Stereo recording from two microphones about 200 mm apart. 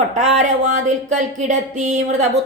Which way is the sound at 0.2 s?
35° right (ahead or behind).